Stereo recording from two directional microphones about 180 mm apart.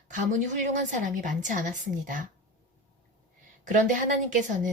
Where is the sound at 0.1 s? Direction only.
45° right (ahead or behind).